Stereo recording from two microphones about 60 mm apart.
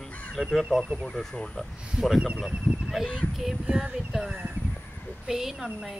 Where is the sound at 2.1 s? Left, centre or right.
Centre.